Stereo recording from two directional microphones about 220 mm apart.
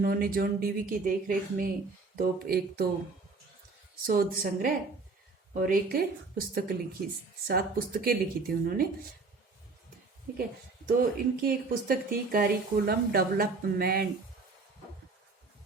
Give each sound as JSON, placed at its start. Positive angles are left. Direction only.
{"t": 0.0, "sound": "speech", "side_deg": -40}
{"t": 4.0, "sound": "speech", "side_deg": -40}
{"t": 8.0, "sound": "speech", "side_deg": -40}
{"t": 10.3, "sound": "speech", "side_deg": -40}